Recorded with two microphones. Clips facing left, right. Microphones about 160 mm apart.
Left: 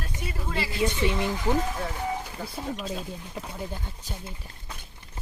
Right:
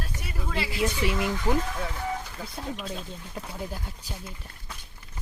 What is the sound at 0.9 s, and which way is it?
Speech, 25° left (ahead or behind).